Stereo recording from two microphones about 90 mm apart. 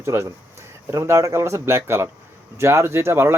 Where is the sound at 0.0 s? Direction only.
30° right (ahead or behind).